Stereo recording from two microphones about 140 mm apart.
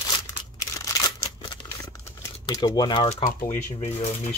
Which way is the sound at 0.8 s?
25° left (ahead or behind).